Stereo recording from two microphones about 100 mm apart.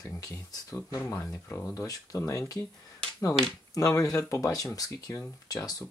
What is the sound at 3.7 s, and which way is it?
Speech, 35° left (ahead or behind).